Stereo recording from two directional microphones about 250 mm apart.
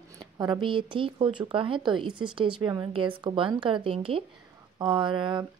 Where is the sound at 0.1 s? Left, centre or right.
Centre.